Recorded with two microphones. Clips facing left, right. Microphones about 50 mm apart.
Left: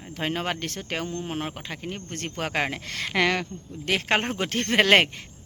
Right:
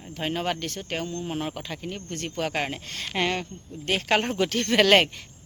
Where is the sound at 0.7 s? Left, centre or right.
Left.